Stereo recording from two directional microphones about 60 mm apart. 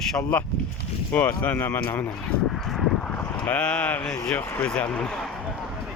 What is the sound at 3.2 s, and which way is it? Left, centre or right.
Speech, left.